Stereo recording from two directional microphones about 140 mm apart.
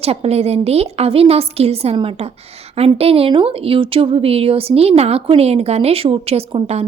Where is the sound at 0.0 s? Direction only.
45° right (ahead or behind).